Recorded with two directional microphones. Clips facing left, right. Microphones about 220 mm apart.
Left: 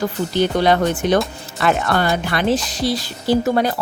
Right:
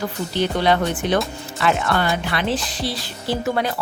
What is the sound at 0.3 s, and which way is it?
Speech, 45° left (ahead or behind).